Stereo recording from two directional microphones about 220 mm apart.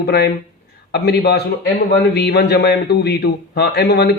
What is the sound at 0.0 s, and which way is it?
Speech, 45° left (ahead or behind).